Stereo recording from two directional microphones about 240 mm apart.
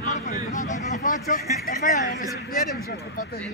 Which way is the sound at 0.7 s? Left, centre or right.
Left.